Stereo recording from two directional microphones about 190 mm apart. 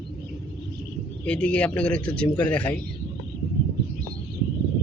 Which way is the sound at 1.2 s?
5° left (ahead or behind).